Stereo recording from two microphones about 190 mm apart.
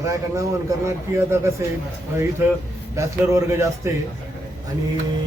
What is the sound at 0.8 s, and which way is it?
Speech, 15° right (ahead or behind).